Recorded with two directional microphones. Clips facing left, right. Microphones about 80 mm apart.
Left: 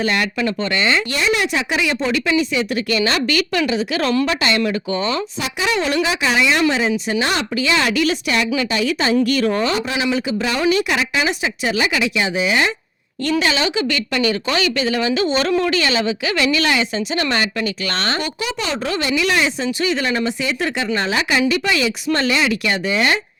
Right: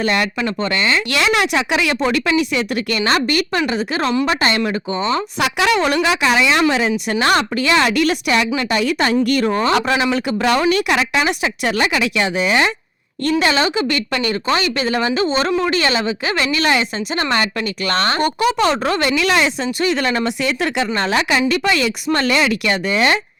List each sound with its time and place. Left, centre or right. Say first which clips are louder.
0.0 s speech: right 1 dB; right
1.1 s a woman's voice: right 2 dB; right
3.0 s speech: right 4 dB; right
5.4 s a woman's voice: right 7 dB; right
9.5 s speech: right 2 dB; right
9.7 s a woman's voice: right 5 dB; right
10.0 s a woman's voice: right 2 dB; right
13.4 s speech: right 4 dB; right
19.8 s a woman's voice: right 2 dB; right